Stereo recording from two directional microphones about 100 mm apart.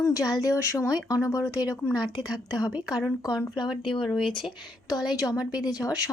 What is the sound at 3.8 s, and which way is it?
Speech, 55° left (ahead or behind).